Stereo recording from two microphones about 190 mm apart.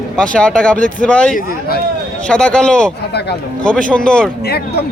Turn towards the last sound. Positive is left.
turn(degrees=5)  # may be behind; listen again after turning